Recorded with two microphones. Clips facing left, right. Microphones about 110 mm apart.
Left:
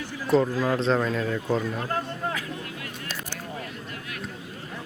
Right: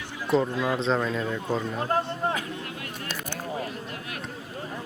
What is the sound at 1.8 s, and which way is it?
Speech, 30° right (ahead or behind).